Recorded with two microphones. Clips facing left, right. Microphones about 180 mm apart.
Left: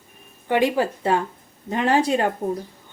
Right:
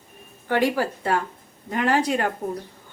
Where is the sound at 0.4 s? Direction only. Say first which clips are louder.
Left 2 dB; 20° left (ahead or behind).